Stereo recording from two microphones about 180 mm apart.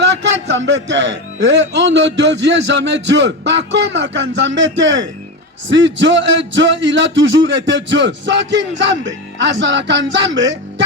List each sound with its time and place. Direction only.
0.2 s a man's voice: 85° right
6.5 s music: 90° right